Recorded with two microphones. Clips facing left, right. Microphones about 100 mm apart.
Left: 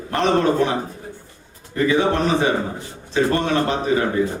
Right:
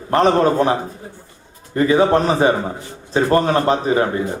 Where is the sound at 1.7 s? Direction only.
35° right (ahead or behind).